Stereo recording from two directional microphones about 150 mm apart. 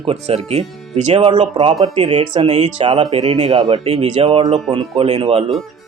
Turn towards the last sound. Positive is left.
turn(degrees=-45)  # may be behind; listen again after turning